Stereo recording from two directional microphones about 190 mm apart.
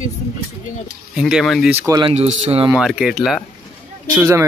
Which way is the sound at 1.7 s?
10° right (ahead or behind).